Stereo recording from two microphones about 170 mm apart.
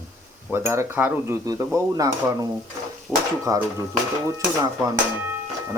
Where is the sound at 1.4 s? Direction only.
20° right (ahead or behind).